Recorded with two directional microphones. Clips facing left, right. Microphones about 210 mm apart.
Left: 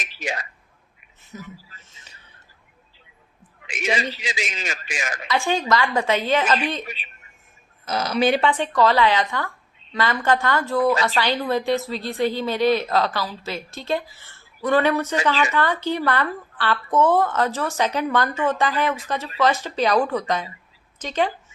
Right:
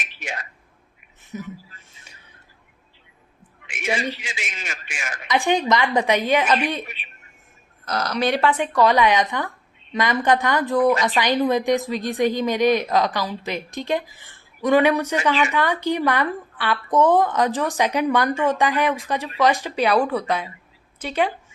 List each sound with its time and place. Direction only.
0.0 s speech: 35° left (ahead or behind)
1.3 s speech: 20° right (ahead or behind)
4.3 s a man's voice: 35° left (ahead or behind)
5.3 s speech: 15° right (ahead or behind)
7.9 s speech: 5° left (ahead or behind)